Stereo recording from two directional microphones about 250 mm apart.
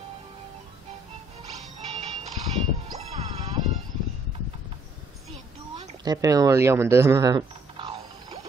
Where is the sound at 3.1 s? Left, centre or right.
Right.